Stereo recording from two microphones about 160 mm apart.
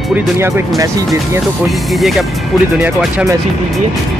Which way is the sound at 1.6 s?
Centre (ahead or behind).